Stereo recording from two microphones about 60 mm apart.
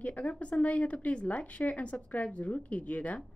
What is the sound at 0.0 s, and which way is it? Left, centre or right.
A woman's voice, left.